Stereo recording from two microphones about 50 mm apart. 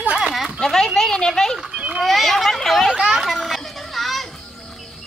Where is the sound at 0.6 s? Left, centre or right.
Centre.